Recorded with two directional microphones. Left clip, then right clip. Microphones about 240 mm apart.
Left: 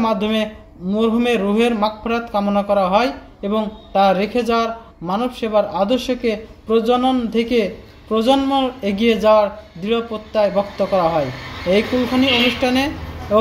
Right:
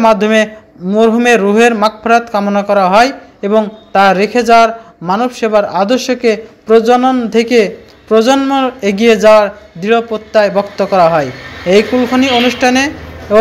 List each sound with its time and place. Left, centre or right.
0.9 s a man's voice: right
3.3 s speech: right
3.9 s a man's voice: right